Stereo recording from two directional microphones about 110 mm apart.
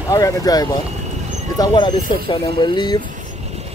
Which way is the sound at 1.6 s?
45° left (ahead or behind).